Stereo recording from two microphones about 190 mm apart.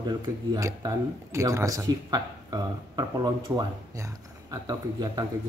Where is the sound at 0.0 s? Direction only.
20° right (ahead or behind).